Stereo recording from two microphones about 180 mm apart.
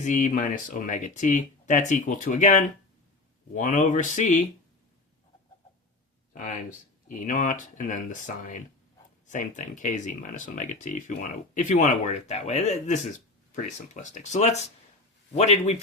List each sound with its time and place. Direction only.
0.0 s speech: 45° left (ahead or behind)
6.3 s speech: 45° left (ahead or behind)